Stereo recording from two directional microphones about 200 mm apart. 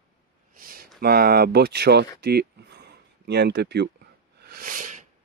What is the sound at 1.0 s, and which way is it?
Speech, 50° right (ahead or behind).